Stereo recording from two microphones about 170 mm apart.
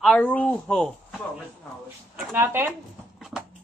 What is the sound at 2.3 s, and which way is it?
Speech, 10° right (ahead or behind).